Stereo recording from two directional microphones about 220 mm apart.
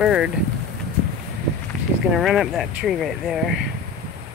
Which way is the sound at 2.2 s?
Centre (ahead or behind).